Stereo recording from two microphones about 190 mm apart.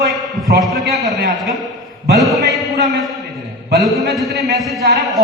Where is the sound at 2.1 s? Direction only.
Centre (ahead or behind).